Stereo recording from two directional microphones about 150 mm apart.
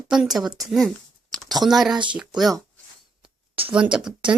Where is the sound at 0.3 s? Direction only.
Centre (ahead or behind).